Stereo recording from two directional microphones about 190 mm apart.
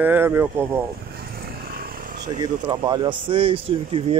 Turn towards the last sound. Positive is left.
turn(degrees=-30)  # may be behind; listen again after turning